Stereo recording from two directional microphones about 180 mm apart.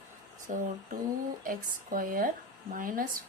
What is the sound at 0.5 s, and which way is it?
Speech, 40° right (ahead or behind).